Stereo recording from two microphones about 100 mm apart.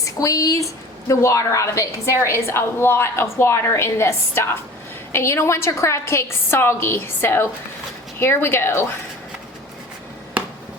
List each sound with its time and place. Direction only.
0.0 s a woman's voice: 35° left (ahead or behind)